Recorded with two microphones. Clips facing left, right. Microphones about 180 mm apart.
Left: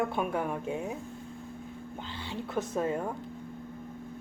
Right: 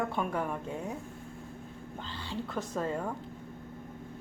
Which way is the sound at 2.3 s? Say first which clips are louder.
Left 3 dB; 20° left (ahead or behind).